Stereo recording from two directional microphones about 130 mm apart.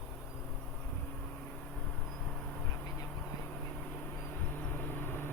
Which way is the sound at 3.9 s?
15° left (ahead or behind).